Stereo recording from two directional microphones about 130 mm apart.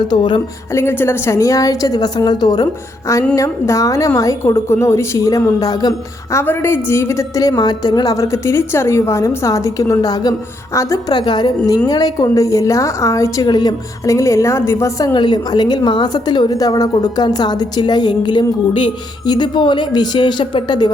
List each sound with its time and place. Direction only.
0.1 s a woman's voice: 35° left (ahead or behind)
0.7 s a woman's voice: 20° left (ahead or behind)
6.3 s a woman's voice: 20° left (ahead or behind); by 20.9 s 35° left (ahead or behind)